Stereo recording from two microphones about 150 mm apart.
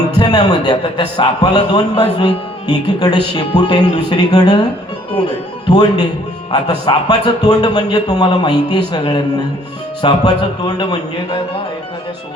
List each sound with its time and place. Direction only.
0.2 s a man's voice: 25° left (ahead or behind)
5.6 s a man's voice: 30° left (ahead or behind)